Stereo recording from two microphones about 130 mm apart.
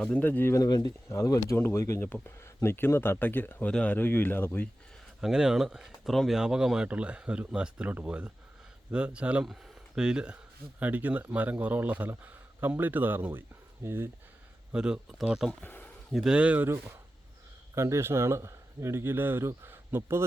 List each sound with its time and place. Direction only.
0.0 s speech: 10° left (ahead or behind)
5.2 s speech: 5° right (ahead or behind)
14.7 s speech: 5° right (ahead or behind)
15.6 s a sound: 15° left (ahead or behind)
16.1 s speech: 5° right (ahead or behind)